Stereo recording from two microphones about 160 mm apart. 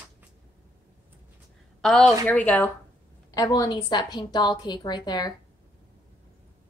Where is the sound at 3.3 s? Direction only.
25° left (ahead or behind).